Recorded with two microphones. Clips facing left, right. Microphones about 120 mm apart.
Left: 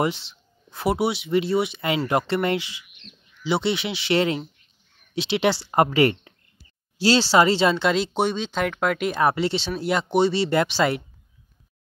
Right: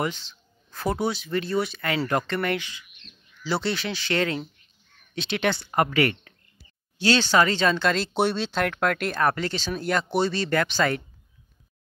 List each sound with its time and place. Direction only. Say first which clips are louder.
0.0 s a sound: left 4 dB; 20° left (ahead or behind)
0.8 s speech: left 3 dB; 10° left (ahead or behind)
1.1 s speech: left 4 dB; 20° left (ahead or behind)
7.7 s speech: left 2 dB; 5° left (ahead or behind)
9.4 s speech: left 4 dB; 25° left (ahead or behind)